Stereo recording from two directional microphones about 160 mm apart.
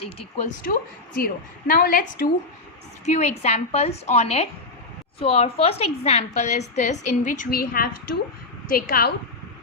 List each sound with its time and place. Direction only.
0.0 s speech: 40° left (ahead or behind)
1.2 s a woman's voice: 65° left (ahead or behind)
3.1 s a woman's voice: 45° left (ahead or behind); by 9.1 s 70° left (ahead or behind)